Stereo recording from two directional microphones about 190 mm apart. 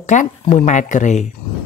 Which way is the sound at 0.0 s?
40° left (ahead or behind).